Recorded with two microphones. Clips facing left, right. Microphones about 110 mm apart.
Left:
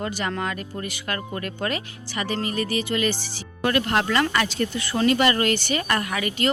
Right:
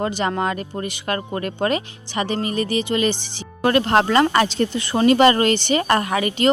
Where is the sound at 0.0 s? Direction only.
25° right (ahead or behind).